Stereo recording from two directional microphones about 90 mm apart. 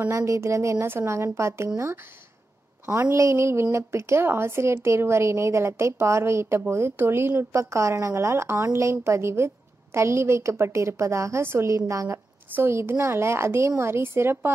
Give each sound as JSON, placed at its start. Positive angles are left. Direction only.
{"t": 0.1, "sound": "a woman's voice", "side_deg": -35}
{"t": 2.9, "sound": "a woman's voice", "side_deg": -35}